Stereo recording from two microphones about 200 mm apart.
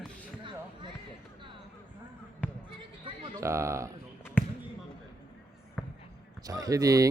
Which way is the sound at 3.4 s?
15° right (ahead or behind).